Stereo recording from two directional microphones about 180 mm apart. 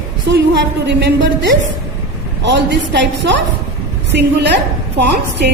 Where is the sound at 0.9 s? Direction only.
80° right.